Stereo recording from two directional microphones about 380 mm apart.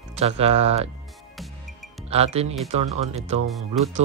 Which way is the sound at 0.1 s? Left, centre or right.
Centre.